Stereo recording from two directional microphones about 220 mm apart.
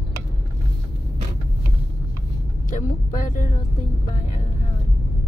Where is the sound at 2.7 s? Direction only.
35° left (ahead or behind).